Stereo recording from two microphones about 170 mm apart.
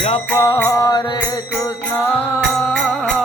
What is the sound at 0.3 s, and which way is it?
Music, 20° left (ahead or behind).